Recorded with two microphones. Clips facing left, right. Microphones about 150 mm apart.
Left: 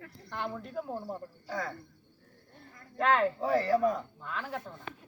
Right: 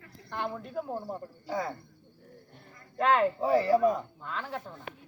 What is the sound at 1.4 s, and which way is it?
Speech, 20° right (ahead or behind).